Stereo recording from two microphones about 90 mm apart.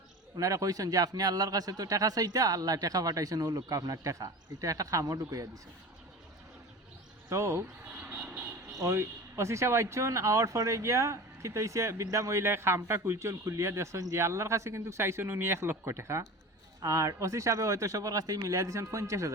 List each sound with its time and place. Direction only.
0.3 s speech: 40° right (ahead or behind)
7.3 s speech: 35° right (ahead or behind)
7.9 s vehicle: 20° right (ahead or behind)
8.7 s speech: 35° right (ahead or behind)